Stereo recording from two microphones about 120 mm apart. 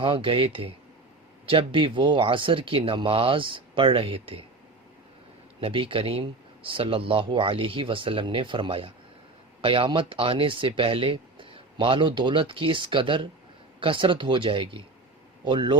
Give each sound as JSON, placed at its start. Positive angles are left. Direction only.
{"t": 0.0, "sound": "speech", "side_deg": -45}
{"t": 5.5, "sound": "a man's voice", "side_deg": -50}